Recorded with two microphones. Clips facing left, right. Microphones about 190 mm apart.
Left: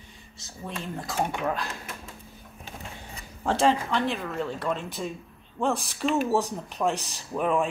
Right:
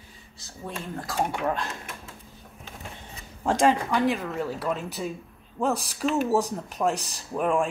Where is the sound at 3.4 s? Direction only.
10° right (ahead or behind).